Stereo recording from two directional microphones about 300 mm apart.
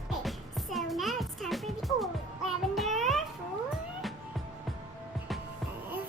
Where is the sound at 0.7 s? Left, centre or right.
Centre.